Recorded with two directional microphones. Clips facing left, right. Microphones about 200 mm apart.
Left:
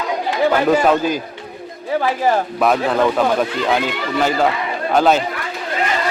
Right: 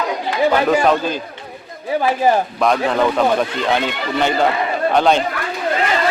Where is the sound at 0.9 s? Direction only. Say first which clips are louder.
Left 1 dB; 10° left (ahead or behind).